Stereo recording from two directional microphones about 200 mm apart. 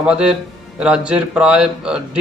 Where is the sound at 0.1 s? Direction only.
5° right (ahead or behind).